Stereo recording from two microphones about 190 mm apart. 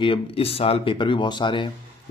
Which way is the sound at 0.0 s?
30° left (ahead or behind).